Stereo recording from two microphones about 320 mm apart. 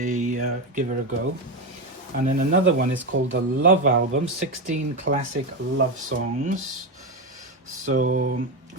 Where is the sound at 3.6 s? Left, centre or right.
Right.